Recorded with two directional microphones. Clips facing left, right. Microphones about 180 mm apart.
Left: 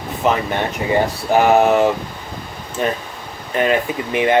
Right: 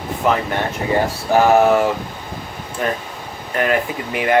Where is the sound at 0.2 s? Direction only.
20° left (ahead or behind).